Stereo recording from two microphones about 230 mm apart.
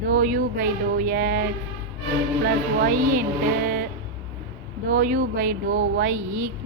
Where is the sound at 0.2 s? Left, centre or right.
Right.